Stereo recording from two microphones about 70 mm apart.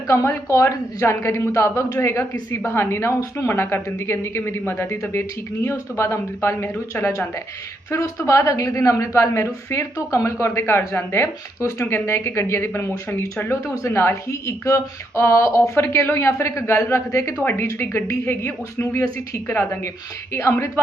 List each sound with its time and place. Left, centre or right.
0.1 s speech: left
6.0 s speech: left
15.7 s speech: left
17.4 s speech: left